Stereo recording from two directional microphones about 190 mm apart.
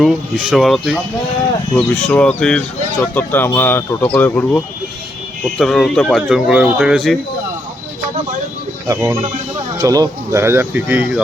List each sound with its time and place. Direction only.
0.0 s speech: centre (ahead or behind)
8.9 s speech: 15° right (ahead or behind)